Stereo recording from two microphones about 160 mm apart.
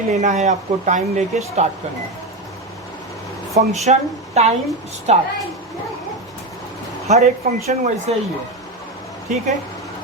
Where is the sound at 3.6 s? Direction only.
50° right (ahead or behind).